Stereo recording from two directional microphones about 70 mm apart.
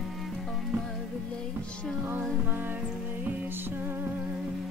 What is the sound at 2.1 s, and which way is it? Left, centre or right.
Music, right.